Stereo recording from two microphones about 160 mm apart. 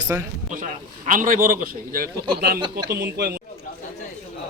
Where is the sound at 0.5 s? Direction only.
55° right (ahead or behind).